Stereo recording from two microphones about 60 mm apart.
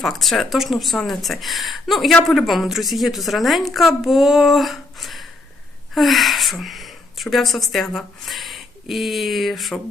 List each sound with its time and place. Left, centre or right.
0.0 s a woman's voice: centre